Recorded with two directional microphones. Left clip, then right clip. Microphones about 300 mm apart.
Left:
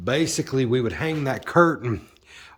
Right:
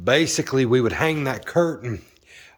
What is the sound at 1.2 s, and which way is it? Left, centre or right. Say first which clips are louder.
Speech: left 2 dB; centre.